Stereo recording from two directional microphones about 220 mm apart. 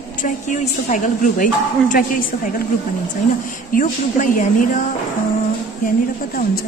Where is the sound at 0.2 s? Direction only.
35° left (ahead or behind).